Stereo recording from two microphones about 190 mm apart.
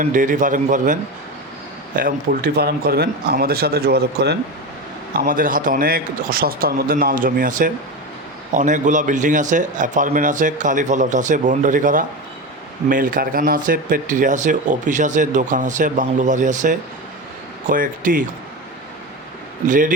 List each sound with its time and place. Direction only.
0.0 s a man's voice: 45° right (ahead or behind)
2.0 s a man's voice: 50° right (ahead or behind)
19.6 s a man's voice: 45° right (ahead or behind)